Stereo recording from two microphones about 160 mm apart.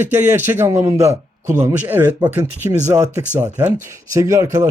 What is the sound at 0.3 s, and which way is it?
A man's voice, 15° right (ahead or behind).